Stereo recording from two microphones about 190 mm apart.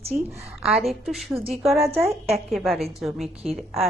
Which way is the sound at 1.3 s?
30° right (ahead or behind).